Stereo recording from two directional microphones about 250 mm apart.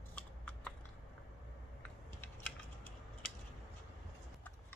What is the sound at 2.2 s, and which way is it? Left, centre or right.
Typing, centre.